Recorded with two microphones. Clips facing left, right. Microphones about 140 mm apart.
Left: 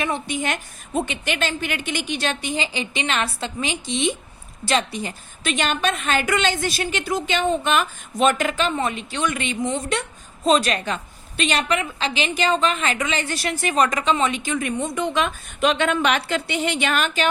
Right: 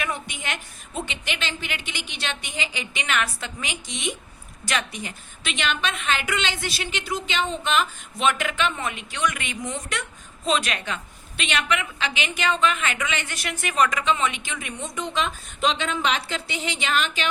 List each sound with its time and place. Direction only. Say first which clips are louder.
0.0 s a woman's voice: left 5 dB; 30° left (ahead or behind)
0.4 s a woman's voice: left 6 dB; 45° left (ahead or behind)